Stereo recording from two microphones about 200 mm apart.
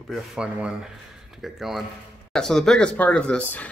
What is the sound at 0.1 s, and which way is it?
Speech, 5° right (ahead or behind).